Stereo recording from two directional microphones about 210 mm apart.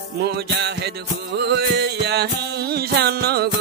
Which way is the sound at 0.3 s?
50° right (ahead or behind).